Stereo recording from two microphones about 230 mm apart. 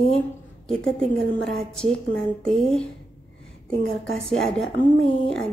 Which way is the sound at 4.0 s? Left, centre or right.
Centre.